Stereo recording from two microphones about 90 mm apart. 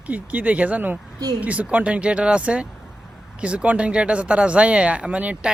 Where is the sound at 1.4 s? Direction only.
15° right (ahead or behind).